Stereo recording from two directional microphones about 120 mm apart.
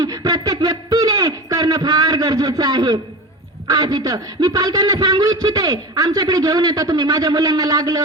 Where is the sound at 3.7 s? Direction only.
35° right (ahead or behind).